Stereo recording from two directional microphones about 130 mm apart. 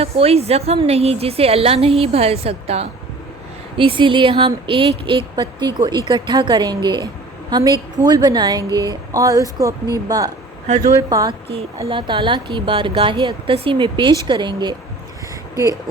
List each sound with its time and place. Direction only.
0.0 s a woman's voice: 50° right (ahead or behind)
3.8 s speech: 40° right (ahead or behind)
11.3 s speech: 45° right (ahead or behind)